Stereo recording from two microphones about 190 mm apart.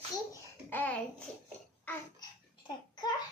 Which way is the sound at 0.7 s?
10° left (ahead or behind).